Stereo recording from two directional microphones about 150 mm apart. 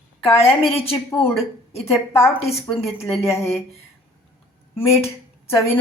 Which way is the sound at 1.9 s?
15° left (ahead or behind).